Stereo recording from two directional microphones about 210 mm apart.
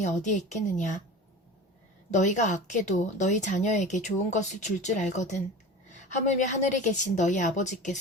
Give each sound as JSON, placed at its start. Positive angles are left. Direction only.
{"t": 0.0, "sound": "a woman's voice", "side_deg": 35}
{"t": 2.0, "sound": "a woman's voice", "side_deg": 35}